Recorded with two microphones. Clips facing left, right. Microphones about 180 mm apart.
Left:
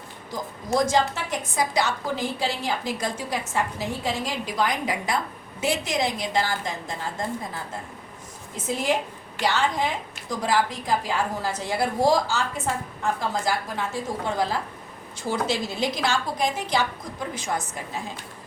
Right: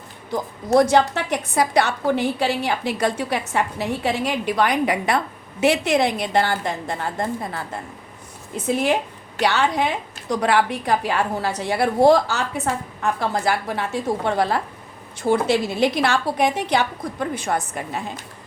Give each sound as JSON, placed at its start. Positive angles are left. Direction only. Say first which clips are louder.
{"t": 0.3, "sound": "a woman's voice", "louder": "right 6 dB", "side_deg": -65}
{"t": 8.6, "sound": "a woman's voice", "louder": "right 5 dB", "side_deg": -65}